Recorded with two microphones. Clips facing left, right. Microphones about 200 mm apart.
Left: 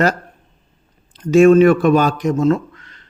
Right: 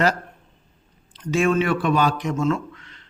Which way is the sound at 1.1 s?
45° left (ahead or behind).